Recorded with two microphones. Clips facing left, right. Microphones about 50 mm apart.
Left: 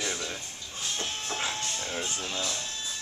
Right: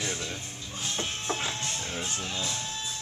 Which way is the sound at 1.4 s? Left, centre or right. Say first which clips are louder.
Even; centre.